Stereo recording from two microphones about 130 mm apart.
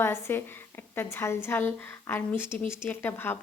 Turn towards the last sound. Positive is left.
turn(degrees=15)  # may be behind; listen again after turning